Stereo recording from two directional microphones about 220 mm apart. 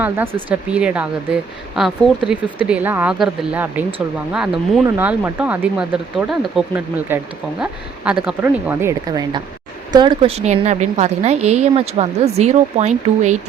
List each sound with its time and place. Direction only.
0.0 s a woman's voice: 10° right (ahead or behind); by 13.4 s 30° right (ahead or behind)